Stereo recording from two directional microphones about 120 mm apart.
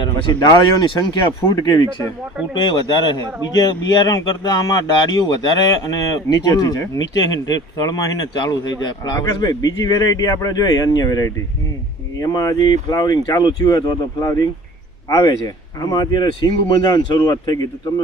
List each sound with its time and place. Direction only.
0.0 s speech: 35° left (ahead or behind)
15.8 s speech: 30° left (ahead or behind)